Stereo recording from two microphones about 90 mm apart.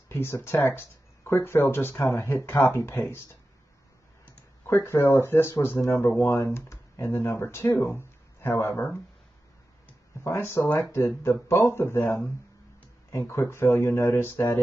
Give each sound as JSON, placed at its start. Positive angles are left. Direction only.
{"t": 0.1, "sound": "speech", "side_deg": 30}
{"t": 4.6, "sound": "speech", "side_deg": 30}
{"t": 10.2, "sound": "speech", "side_deg": 30}